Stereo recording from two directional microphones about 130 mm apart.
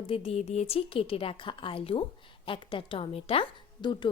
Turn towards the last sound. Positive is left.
turn(degrees=40)  # may be behind; listen again after turning